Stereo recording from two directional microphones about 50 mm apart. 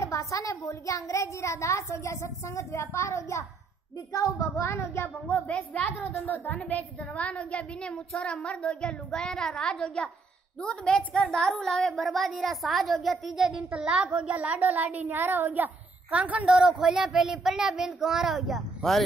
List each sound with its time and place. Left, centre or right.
0.1 s a child's voice: left
4.2 s a child's voice: left
6.1 s a woman's voice: left; by 13.7 s centre
13.7 s a child's voice: right
16.4 s speech: centre
18.8 s speech: centre